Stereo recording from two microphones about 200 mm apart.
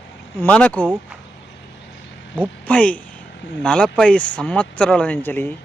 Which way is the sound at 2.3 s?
5° left (ahead or behind).